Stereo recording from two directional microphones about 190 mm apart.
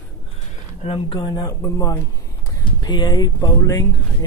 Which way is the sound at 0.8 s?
30° left (ahead or behind).